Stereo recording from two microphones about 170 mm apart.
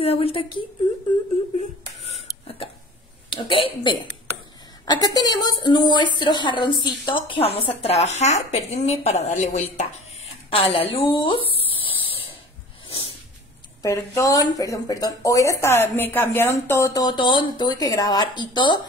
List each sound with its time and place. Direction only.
0.0 s speech: 35° left (ahead or behind)
1.6 s a sound: 40° left (ahead or behind)
3.3 s a woman's voice: 30° left (ahead or behind)
12.1 s snort: 35° left (ahead or behind)
13.8 s a woman's voice: 15° left (ahead or behind)